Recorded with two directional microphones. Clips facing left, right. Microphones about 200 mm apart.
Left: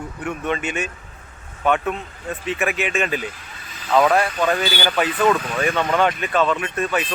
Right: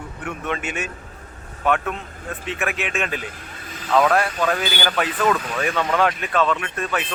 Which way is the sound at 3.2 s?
50° right (ahead or behind).